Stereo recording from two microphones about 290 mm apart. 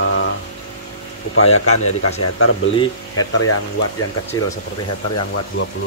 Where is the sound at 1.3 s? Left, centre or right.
Left.